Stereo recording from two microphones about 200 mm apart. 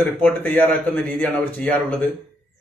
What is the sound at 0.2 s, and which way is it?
Speech, 10° left (ahead or behind).